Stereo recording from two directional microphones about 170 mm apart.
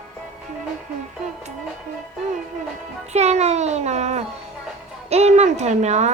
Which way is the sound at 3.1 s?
40° right (ahead or behind).